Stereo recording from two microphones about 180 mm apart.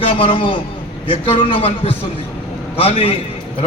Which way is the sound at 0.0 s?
30° left (ahead or behind).